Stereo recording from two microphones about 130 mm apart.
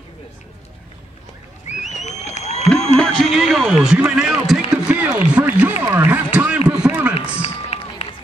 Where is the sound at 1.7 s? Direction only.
65° left (ahead or behind).